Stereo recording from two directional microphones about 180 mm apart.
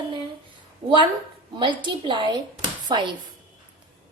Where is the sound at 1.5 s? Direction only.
25° right (ahead or behind).